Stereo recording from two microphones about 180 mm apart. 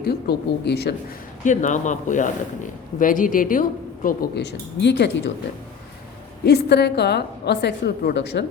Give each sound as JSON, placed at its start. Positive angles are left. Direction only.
{"t": 0.0, "sound": "speech", "side_deg": 65}
{"t": 1.5, "sound": "a woman's voice", "side_deg": 45}
{"t": 6.4, "sound": "a woman's voice", "side_deg": 65}